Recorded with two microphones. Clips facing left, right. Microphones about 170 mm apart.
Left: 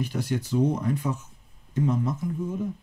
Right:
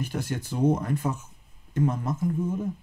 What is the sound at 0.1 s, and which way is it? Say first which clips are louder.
Speech: left 4 dB; 50° right (ahead or behind).